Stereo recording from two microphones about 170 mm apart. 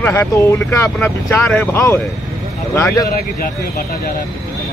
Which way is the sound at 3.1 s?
60° left (ahead or behind).